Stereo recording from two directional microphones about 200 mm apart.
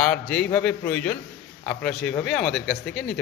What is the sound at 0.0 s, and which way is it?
A man's voice, 5° left (ahead or behind).